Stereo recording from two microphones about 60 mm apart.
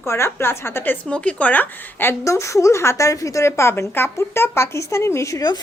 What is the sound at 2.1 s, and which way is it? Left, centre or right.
A woman's voice, left.